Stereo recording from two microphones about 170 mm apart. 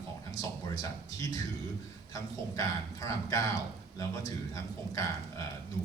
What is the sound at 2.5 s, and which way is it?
A man's voice, 20° left (ahead or behind).